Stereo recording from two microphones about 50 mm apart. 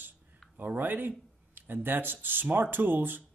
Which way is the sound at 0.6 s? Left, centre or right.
Right.